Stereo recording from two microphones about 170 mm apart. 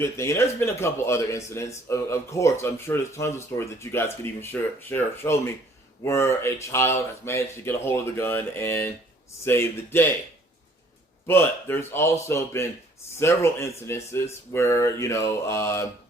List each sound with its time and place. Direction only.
0.0 s speech: 15° left (ahead or behind)
11.3 s speech: 15° left (ahead or behind)